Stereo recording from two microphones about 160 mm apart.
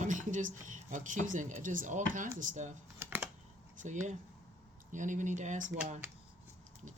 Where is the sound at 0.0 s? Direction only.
50° right (ahead or behind).